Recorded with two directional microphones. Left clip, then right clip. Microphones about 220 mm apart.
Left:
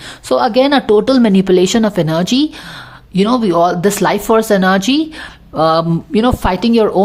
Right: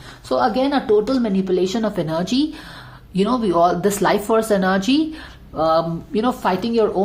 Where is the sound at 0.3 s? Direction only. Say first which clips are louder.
Left 7 dB; 35° left (ahead or behind).